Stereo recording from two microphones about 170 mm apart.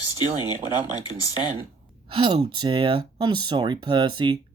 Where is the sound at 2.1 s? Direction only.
25° right (ahead or behind).